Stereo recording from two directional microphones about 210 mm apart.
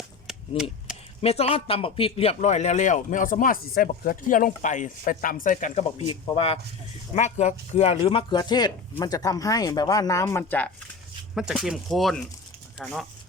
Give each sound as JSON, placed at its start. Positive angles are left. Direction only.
{"t": 0.3, "sound": "cap gun", "side_deg": -5}
{"t": 1.2, "sound": "a man's voice", "side_deg": 30}
{"t": 6.1, "sound": "a man's voice", "side_deg": 25}
{"t": 11.3, "sound": "speech", "side_deg": 0}